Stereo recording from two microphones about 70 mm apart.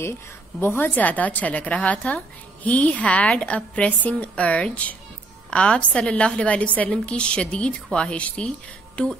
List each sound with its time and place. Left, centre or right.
0.6 s a woman's voice: left